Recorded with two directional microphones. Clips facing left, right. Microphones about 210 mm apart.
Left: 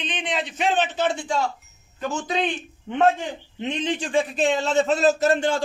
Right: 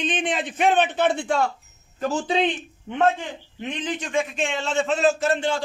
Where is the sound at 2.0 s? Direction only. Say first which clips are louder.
Right 3 dB; 30° right (ahead or behind).